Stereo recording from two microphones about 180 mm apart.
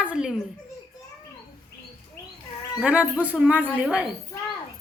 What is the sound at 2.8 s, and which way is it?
A woman's voice, 10° right (ahead or behind).